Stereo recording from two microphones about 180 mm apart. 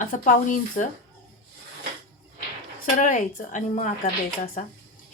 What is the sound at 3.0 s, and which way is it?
Speech, 45° left (ahead or behind).